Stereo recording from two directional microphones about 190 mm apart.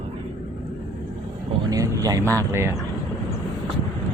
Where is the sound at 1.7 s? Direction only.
20° right (ahead or behind).